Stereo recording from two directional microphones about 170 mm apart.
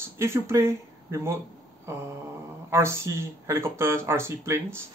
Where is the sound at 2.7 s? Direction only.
15° right (ahead or behind).